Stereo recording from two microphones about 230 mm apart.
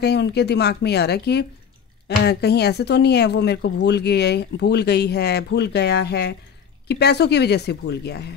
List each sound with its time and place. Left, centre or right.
0.0 s speech: left